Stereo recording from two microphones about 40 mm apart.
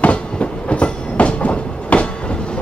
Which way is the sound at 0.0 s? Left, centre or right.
Left.